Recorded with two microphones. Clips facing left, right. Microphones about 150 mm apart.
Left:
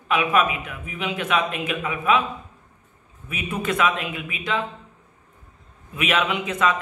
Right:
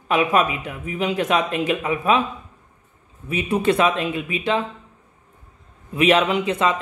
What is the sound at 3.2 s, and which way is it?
Speech, 35° right (ahead or behind).